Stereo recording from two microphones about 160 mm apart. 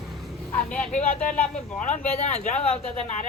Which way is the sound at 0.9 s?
55° left (ahead or behind).